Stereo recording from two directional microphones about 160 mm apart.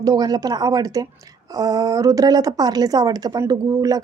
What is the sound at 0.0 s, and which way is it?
A woman's voice, 25° right (ahead or behind).